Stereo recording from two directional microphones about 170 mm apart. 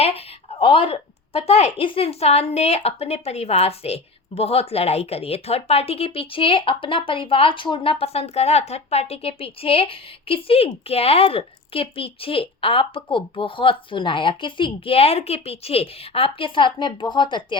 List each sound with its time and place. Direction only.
0.6 s speech: 30° left (ahead or behind)